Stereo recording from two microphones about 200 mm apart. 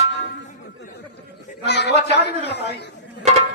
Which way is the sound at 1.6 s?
55° left (ahead or behind).